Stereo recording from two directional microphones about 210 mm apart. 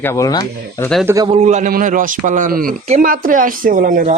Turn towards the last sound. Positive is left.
turn(degrees=-40)  # may be behind; listen again after turning